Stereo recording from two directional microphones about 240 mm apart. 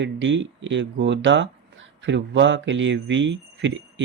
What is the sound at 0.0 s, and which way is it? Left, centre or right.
Speech, right.